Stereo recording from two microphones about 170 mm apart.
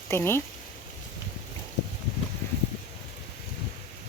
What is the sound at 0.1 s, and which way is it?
Speech, 15° left (ahead or behind).